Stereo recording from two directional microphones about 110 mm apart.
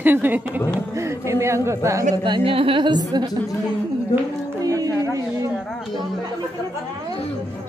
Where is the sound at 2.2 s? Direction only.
50° right (ahead or behind).